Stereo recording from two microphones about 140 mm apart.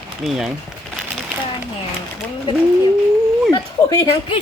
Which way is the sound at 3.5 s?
25° left (ahead or behind).